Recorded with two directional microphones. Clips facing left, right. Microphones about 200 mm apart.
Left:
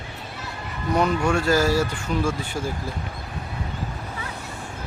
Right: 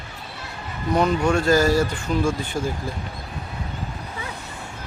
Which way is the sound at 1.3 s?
5° left (ahead or behind).